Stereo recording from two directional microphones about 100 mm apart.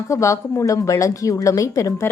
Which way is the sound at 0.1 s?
30° left (ahead or behind).